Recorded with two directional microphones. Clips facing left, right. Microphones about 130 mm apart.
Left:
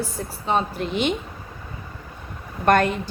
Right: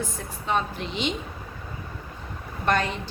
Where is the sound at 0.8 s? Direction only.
55° left (ahead or behind).